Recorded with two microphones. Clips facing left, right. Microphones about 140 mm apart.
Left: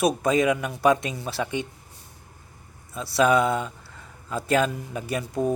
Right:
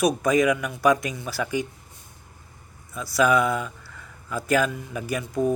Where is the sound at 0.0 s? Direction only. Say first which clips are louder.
Right 1 dB; 25° left (ahead or behind).